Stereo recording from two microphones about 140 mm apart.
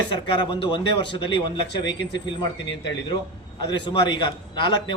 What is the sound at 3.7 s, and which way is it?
A man's voice, 30° left (ahead or behind).